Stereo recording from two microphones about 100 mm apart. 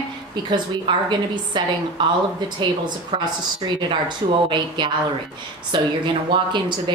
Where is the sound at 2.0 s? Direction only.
50° right (ahead or behind).